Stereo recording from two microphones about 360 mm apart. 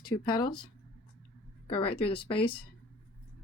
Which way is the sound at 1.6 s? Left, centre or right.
Centre.